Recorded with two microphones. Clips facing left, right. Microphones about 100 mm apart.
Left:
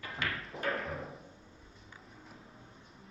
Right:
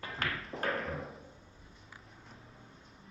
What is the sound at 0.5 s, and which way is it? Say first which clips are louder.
Music: right 1 dB; centre (ahead or behind).